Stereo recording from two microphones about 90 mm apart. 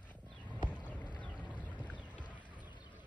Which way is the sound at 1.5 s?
15° left (ahead or behind).